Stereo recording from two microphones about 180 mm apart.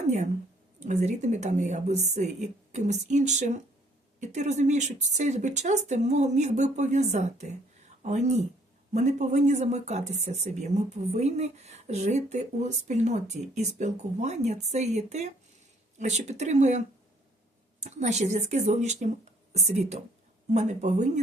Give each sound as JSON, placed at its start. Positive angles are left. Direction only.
{"t": 0.8, "sound": "speech", "side_deg": -40}